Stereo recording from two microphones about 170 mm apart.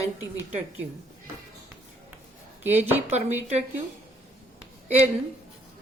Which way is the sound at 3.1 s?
40° right (ahead or behind).